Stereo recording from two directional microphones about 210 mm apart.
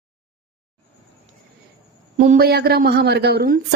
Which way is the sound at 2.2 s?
40° right (ahead or behind).